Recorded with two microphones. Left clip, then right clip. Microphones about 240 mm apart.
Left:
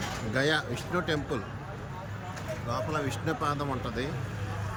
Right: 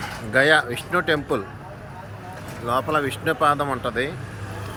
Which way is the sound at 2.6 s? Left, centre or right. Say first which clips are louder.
Right 11 dB; centre.